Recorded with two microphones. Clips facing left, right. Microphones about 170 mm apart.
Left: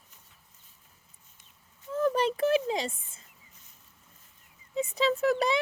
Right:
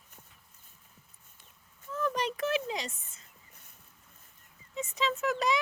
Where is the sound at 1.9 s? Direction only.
30° left (ahead or behind).